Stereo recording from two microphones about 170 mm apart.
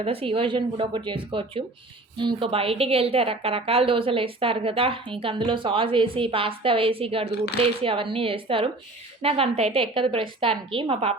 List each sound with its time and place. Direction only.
0.0 s a woman's voice: 35° right (ahead or behind)